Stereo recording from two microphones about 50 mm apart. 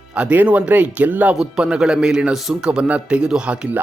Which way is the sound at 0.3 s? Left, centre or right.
Right.